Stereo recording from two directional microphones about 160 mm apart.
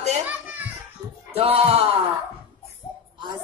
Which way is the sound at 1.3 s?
40° right (ahead or behind).